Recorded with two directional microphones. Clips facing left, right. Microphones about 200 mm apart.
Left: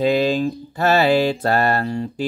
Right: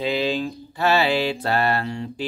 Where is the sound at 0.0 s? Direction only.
45° left (ahead or behind).